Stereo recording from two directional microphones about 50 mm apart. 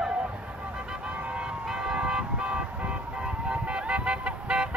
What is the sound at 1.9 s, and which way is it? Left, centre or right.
Vehicle, centre.